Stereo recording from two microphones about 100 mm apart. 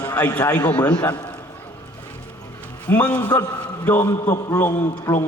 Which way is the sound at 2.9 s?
15° left (ahead or behind).